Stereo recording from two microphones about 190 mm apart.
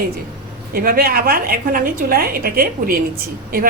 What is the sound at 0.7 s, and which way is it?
A woman's voice, 50° right (ahead or behind).